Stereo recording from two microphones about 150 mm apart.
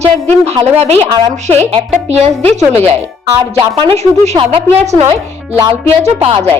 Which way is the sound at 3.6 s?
30° right (ahead or behind).